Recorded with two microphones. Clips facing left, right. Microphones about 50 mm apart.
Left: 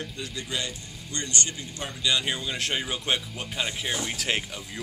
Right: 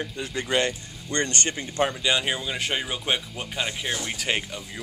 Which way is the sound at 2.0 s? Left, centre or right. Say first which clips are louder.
Right 2 dB; right.